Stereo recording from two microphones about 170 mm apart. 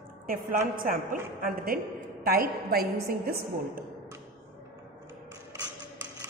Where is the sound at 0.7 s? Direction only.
55° right (ahead or behind).